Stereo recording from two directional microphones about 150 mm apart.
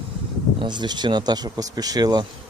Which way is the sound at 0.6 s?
30° right (ahead or behind).